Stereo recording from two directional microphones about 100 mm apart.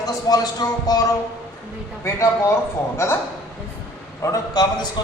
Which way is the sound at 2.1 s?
30° left (ahead or behind).